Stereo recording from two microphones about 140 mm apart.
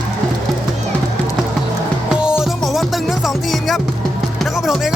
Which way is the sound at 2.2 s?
5° right (ahead or behind).